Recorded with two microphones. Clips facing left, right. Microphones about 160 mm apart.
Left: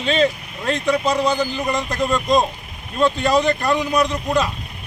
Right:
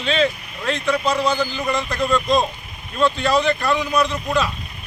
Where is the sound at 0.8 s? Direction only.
20° left (ahead or behind).